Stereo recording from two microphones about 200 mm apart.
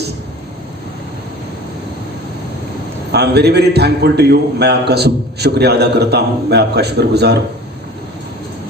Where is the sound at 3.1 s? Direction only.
55° right (ahead or behind).